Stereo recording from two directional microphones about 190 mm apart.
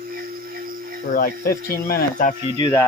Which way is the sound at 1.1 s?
50° left (ahead or behind).